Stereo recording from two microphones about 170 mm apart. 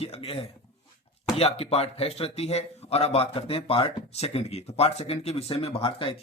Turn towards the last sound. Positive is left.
turn(degrees=30)  # may be behind; listen again after turning